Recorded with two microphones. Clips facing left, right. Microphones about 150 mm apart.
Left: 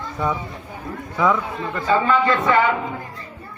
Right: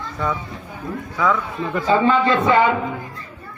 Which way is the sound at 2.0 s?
25° right (ahead or behind).